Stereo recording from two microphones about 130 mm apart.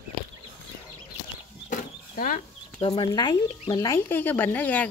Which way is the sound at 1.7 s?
90° left.